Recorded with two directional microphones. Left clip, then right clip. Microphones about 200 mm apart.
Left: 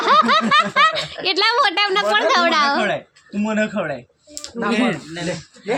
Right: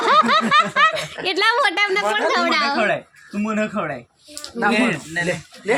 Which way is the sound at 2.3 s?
15° left (ahead or behind).